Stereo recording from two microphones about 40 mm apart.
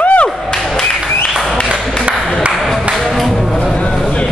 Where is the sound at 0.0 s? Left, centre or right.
Left.